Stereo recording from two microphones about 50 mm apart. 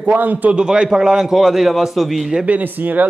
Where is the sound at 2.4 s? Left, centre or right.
Right.